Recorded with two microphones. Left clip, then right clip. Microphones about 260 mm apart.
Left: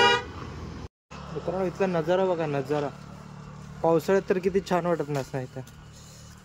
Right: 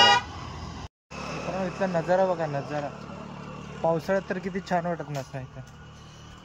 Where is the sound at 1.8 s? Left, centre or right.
Centre.